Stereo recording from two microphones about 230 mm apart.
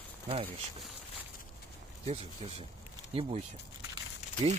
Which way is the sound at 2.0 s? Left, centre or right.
Right.